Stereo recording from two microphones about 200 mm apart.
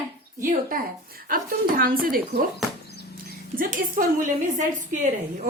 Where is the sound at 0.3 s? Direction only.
40° right (ahead or behind).